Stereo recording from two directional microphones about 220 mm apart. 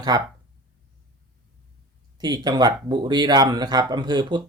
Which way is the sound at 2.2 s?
20° right (ahead or behind).